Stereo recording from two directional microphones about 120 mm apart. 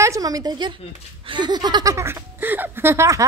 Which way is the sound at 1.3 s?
35° right (ahead or behind).